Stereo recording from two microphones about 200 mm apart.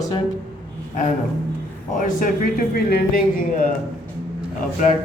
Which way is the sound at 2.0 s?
45° left (ahead or behind).